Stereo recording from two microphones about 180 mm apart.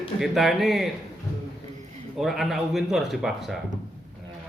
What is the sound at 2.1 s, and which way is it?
A man's voice, centre (ahead or behind).